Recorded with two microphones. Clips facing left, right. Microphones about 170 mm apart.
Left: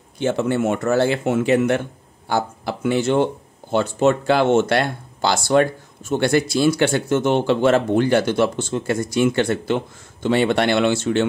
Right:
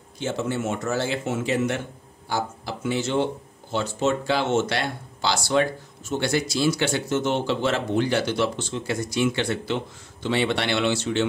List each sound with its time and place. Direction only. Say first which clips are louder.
0.2 s speech: left 7 dB; 60° left (ahead or behind)